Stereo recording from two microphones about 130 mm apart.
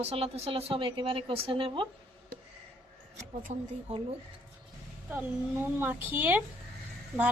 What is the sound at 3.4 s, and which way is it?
Speech, 65° right (ahead or behind).